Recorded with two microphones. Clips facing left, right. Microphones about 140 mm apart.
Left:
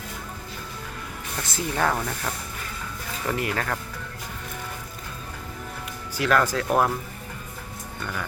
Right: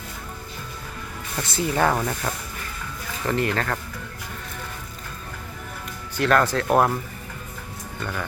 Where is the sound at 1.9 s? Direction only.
15° right (ahead or behind).